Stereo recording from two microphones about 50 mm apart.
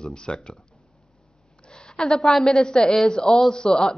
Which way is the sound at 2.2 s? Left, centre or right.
Centre.